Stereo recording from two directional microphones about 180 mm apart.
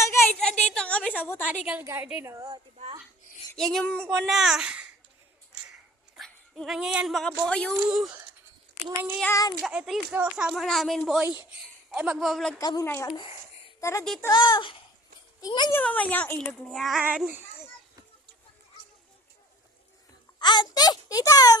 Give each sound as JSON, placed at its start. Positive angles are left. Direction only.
{"t": 0.0, "sound": "a sound", "side_deg": 15}
{"t": 0.3, "sound": "a woman's voice", "side_deg": 5}
{"t": 1.8, "sound": "a woman's voice", "side_deg": -15}
{"t": 3.5, "sound": "speech", "side_deg": 0}
{"t": 6.1, "sound": "a woman's voice", "side_deg": 0}
{"t": 9.2, "sound": "a woman's voice", "side_deg": 15}
{"t": 9.6, "sound": "speech", "side_deg": 0}
{"t": 12.5, "sound": "a child's voice", "side_deg": 20}
{"t": 14.0, "sound": "speech", "side_deg": 0}
{"t": 14.3, "sound": "a child's voice", "side_deg": 25}
{"t": 15.7, "sound": "speech", "side_deg": 10}
{"t": 20.4, "sound": "a child's voice", "side_deg": 25}